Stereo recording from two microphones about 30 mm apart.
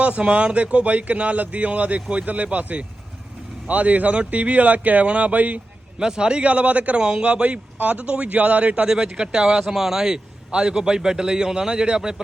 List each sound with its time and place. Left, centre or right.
0.0 s speech: right
6.0 s a man's voice: right
6.4 s speech: right
6.9 s a man's voice: right
7.4 s speech: right
9.1 s a man's voice: right
9.7 s speech: centre
10.5 s a man's voice: right
11.7 s a man's voice: right
11.9 s a man's voice: right